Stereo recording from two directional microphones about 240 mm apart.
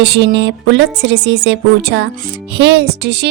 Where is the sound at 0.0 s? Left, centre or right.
Right.